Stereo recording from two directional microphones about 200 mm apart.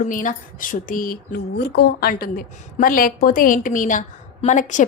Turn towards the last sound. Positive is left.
turn(degrees=40)  # may be behind; listen again after turning